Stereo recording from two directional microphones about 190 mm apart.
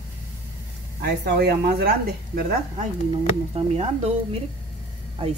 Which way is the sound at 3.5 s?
35° right (ahead or behind).